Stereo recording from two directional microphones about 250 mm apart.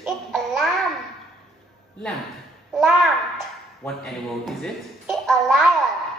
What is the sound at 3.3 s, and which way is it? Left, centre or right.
A man's voice, centre.